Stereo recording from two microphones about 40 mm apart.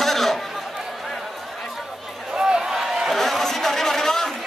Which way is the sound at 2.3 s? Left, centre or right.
Centre.